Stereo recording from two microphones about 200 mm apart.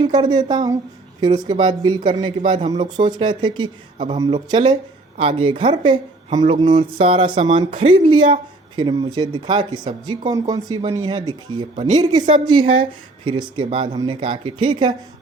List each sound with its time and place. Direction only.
0.0 s speech: 20° right (ahead or behind)